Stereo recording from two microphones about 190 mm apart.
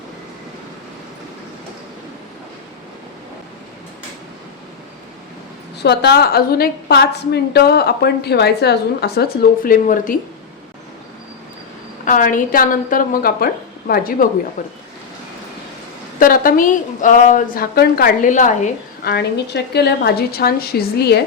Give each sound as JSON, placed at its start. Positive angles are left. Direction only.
{"t": 5.8, "sound": "a woman's voice", "side_deg": 60}
{"t": 12.0, "sound": "a woman's voice", "side_deg": 45}
{"t": 16.1, "sound": "a woman's voice", "side_deg": 45}
{"t": 19.0, "sound": "a woman's voice", "side_deg": 60}